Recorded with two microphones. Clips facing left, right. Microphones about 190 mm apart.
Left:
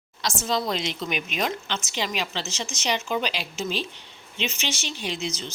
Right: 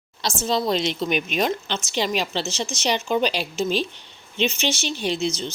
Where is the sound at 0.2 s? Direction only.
30° right (ahead or behind).